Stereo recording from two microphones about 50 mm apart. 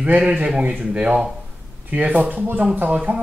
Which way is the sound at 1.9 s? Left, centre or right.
Right.